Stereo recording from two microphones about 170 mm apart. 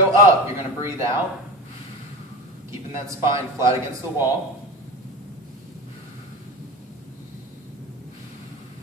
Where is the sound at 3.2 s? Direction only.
15° right (ahead or behind).